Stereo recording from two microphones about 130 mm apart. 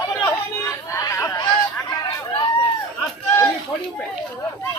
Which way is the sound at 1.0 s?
20° left (ahead or behind).